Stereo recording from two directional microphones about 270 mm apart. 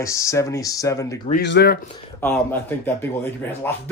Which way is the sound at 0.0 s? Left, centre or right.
Centre.